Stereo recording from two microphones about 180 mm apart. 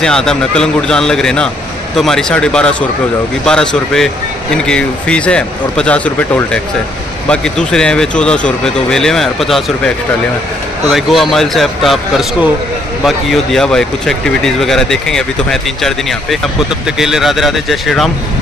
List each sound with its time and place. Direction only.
0.0 s speech: 5° left (ahead or behind)